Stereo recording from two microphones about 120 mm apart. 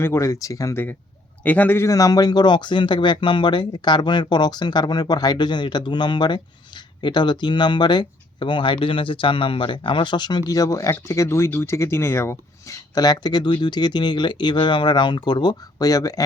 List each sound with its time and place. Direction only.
0.0 s a man's voice: 25° left (ahead or behind)